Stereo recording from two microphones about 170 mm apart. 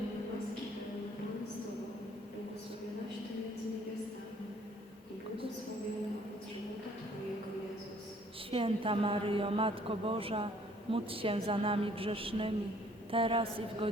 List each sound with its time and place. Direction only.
8.4 s a man's voice: 30° right (ahead or behind)